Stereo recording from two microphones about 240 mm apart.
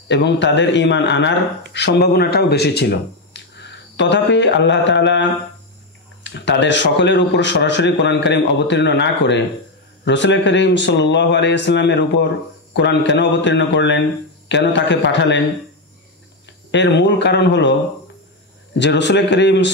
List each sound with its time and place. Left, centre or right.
0.1 s a man's voice: left
3.5 s mantra: left
6.2 s a man's voice: left
16.4 s speech: left
18.8 s a man's voice: left